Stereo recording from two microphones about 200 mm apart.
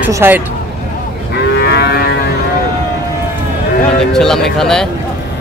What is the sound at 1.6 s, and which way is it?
Moo, 55° left (ahead or behind).